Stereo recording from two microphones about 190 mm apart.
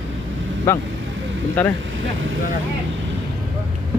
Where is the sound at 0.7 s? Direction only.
15° left (ahead or behind).